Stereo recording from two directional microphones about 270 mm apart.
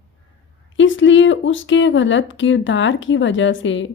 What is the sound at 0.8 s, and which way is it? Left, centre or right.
A woman's voice, left.